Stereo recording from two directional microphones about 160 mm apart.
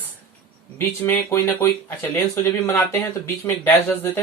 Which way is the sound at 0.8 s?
15° left (ahead or behind).